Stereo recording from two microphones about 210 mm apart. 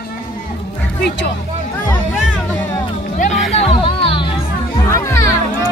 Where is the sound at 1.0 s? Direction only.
50° left (ahead or behind).